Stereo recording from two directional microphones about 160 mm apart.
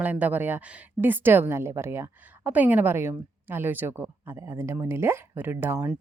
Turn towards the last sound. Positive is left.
turn(degrees=-10)  # may be behind; listen again after turning